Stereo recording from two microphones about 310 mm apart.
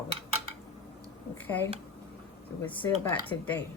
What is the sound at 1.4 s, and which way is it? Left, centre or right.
Speech, centre.